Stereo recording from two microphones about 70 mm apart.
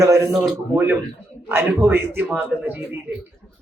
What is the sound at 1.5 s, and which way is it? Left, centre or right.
A man's voice, right.